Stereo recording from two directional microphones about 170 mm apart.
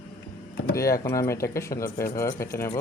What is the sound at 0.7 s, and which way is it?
Speech, 20° left (ahead or behind).